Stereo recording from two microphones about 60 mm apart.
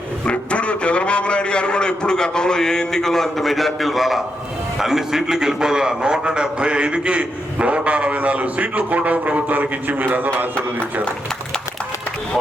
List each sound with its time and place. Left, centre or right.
0.3 s a man's voice: left; by 10.3 s right